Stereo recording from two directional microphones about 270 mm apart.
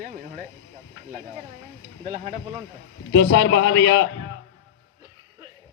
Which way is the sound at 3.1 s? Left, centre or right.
Left.